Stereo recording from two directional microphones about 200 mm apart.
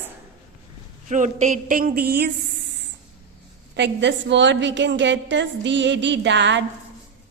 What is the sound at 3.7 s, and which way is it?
A woman's voice, 65° right (ahead or behind).